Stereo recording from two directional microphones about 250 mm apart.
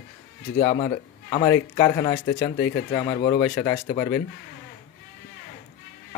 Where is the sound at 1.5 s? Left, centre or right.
Left.